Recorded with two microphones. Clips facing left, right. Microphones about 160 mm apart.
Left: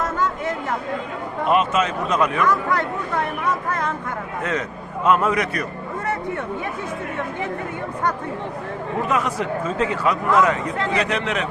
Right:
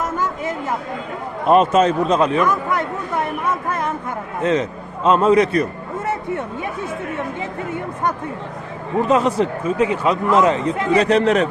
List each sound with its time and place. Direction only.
1.5 s speech: 35° right (ahead or behind); by 3.9 s 20° right (ahead or behind)
5.0 s speech: 25° right (ahead or behind)
9.0 s speech: 30° right (ahead or behind)
9.6 s speech: 15° right (ahead or behind); by 11.4 s 40° right (ahead or behind)